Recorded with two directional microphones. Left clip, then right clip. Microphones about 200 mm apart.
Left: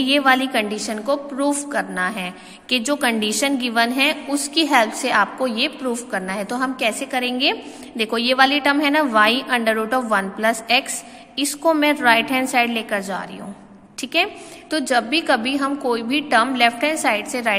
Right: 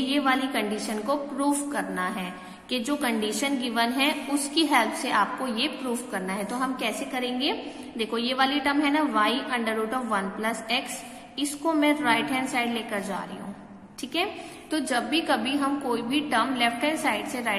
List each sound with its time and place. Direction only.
0.0 s a woman's voice: 40° left (ahead or behind)